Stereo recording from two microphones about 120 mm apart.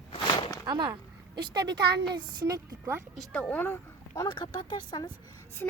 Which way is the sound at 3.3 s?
10° left (ahead or behind).